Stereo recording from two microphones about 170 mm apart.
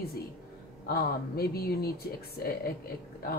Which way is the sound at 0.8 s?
65° left (ahead or behind).